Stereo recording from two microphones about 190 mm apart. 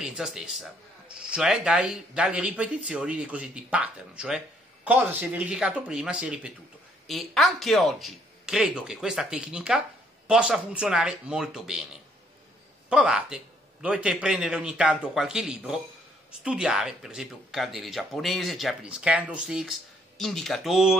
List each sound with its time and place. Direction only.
0.0 s speech: 5° right (ahead or behind)